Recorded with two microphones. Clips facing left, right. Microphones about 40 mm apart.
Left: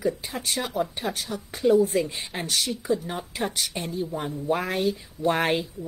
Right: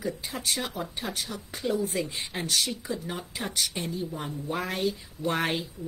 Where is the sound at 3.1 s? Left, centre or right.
Left.